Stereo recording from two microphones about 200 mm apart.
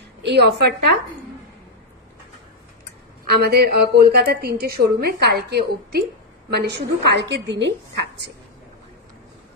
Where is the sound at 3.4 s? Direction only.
50° right (ahead or behind).